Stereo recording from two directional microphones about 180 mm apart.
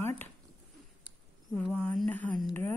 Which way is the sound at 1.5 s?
10° left (ahead or behind).